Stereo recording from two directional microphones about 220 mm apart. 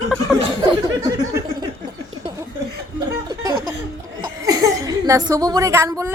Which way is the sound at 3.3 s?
20° right (ahead or behind).